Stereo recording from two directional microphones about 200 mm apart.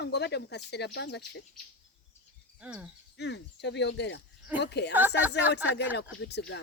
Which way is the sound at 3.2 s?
60° left (ahead or behind).